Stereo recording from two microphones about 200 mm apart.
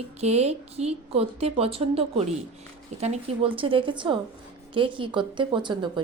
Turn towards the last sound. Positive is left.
turn(degrees=-25)  # may be behind; listen again after turning